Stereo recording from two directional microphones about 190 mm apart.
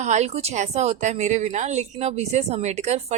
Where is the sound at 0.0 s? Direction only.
40° right (ahead or behind).